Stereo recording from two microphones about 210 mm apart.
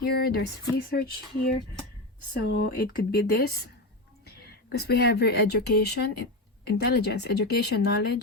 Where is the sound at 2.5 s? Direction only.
50° left (ahead or behind).